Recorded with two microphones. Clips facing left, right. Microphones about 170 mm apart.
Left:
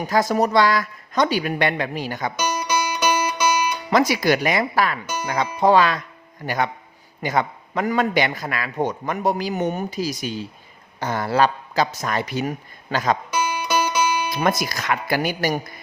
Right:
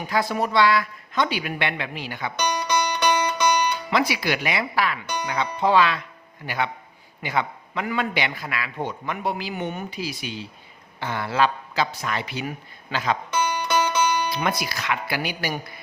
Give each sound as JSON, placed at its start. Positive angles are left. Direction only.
{"t": 0.0, "sound": "a woman's voice", "side_deg": 40}
{"t": 2.4, "sound": "music", "side_deg": 10}
{"t": 3.8, "sound": "a man's voice", "side_deg": 45}
{"t": 13.3, "sound": "music", "side_deg": 10}
{"t": 14.3, "sound": "a man's voice", "side_deg": 45}